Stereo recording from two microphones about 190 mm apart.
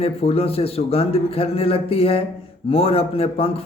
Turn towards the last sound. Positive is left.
turn(degrees=30)  # may be behind; listen again after turning